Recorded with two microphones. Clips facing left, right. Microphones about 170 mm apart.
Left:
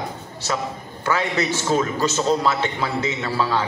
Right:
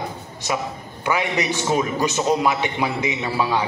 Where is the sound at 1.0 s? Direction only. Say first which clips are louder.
Even; 15° right (ahead or behind).